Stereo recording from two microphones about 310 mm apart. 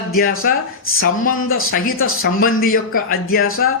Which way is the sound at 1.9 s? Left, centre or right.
Left.